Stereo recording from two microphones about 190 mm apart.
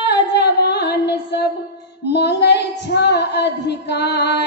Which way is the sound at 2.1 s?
60° left (ahead or behind).